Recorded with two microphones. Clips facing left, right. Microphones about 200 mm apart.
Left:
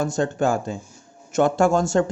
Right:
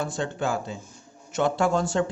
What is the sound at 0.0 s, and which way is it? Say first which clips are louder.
Speech: left 6 dB; 45° left (ahead or behind).